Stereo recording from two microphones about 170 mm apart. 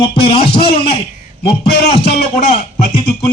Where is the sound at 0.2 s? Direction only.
30° left (ahead or behind).